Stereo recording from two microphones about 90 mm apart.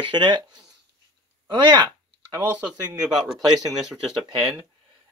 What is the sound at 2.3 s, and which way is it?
Speech, 20° right (ahead or behind).